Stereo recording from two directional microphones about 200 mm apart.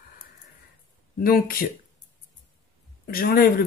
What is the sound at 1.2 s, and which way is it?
Speech, 50° left (ahead or behind).